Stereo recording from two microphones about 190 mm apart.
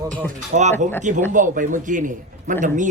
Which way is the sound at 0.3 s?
40° right (ahead or behind).